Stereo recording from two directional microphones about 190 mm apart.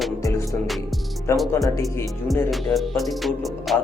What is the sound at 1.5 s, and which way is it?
Speech, 20° left (ahead or behind).